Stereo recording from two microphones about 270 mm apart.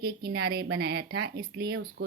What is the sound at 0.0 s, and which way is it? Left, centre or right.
Speech, right.